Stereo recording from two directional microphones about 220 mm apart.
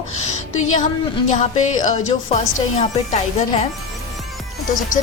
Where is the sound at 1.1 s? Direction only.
30° left (ahead or behind).